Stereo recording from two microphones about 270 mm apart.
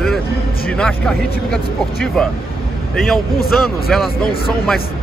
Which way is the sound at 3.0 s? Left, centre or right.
Centre.